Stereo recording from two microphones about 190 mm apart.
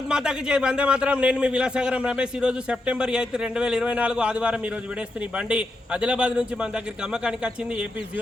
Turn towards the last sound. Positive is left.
turn(degrees=-5)  # may be behind; listen again after turning